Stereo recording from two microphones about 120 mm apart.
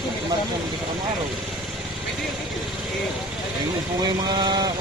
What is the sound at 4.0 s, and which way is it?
Speech, 35° right (ahead or behind).